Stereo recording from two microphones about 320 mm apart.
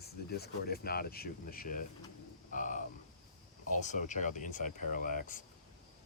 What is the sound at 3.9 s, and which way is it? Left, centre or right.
Speech, left.